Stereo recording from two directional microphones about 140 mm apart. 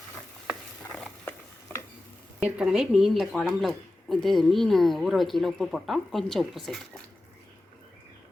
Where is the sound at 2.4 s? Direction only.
5° right (ahead or behind).